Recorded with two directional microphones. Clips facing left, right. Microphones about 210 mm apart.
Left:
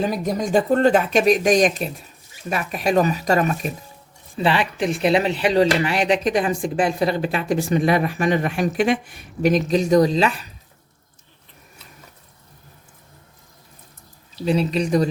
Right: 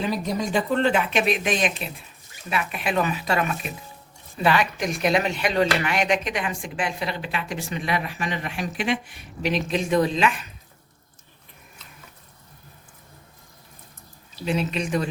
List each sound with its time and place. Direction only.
0.0 s speech: 45° left (ahead or behind)
4.4 s speech: 30° left (ahead or behind)
14.4 s speech: 35° left (ahead or behind)